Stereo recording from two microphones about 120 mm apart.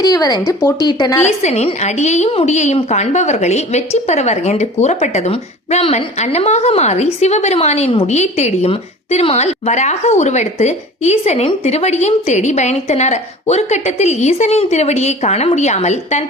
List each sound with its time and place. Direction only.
0.0 s a woman's voice: 30° left (ahead or behind)
1.2 s a woman's voice: 70° left (ahead or behind)